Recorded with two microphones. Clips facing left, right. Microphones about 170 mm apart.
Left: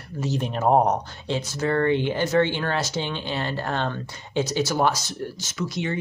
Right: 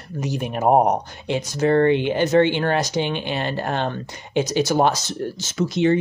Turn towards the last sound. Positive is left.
turn(degrees=-25)  # may be behind; listen again after turning